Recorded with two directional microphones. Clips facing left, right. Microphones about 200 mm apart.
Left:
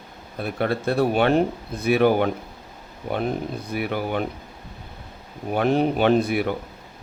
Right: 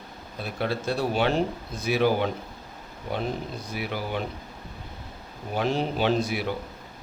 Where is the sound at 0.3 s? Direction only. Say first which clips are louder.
Left 5 dB; 55° left (ahead or behind).